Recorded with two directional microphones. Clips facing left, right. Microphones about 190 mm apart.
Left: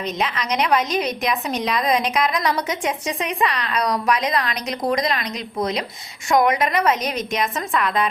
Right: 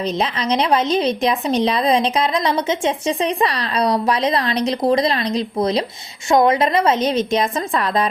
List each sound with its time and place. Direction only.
0.0 s speech: 30° right (ahead or behind)